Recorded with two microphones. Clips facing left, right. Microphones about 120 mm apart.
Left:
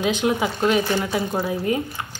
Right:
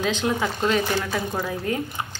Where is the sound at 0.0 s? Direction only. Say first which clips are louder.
Left 3 dB; 15° left (ahead or behind).